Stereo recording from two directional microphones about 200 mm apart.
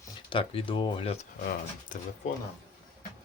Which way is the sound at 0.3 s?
25° left (ahead or behind).